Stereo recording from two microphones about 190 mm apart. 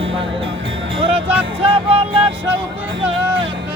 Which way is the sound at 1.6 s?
30° right (ahead or behind).